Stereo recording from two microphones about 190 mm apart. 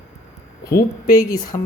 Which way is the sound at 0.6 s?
20° left (ahead or behind).